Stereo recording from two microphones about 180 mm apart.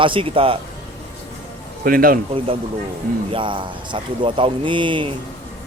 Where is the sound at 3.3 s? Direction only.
25° right (ahead or behind).